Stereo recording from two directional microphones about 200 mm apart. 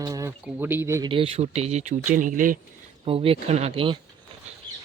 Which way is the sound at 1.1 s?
30° right (ahead or behind).